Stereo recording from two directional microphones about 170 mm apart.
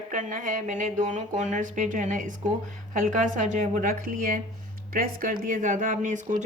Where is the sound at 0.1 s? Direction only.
50° right (ahead or behind).